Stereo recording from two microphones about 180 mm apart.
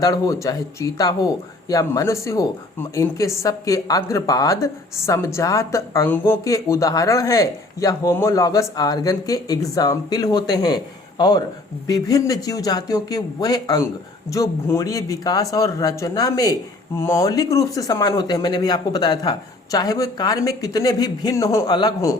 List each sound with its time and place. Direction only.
0.0 s speech: 20° left (ahead or behind)